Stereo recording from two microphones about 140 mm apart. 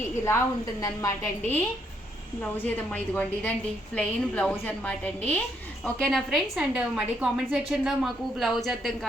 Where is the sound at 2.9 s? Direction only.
10° left (ahead or behind).